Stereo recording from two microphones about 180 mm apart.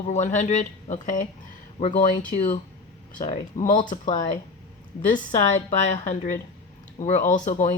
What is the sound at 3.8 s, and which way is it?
Speech, 25° left (ahead or behind).